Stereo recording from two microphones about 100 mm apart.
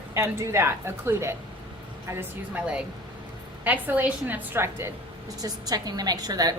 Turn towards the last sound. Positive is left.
turn(degrees=-40)  # may be behind; listen again after turning